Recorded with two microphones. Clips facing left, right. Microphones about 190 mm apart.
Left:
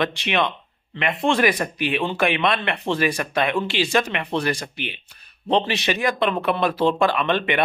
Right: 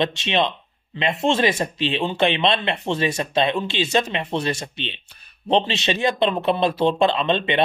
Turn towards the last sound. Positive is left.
turn(degrees=-25)  # may be behind; listen again after turning